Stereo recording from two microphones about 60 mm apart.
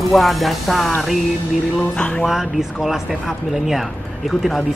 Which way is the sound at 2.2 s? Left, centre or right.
Centre.